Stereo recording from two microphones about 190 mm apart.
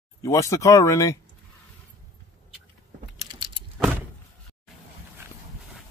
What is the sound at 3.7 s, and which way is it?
Vehicle, 5° right (ahead or behind).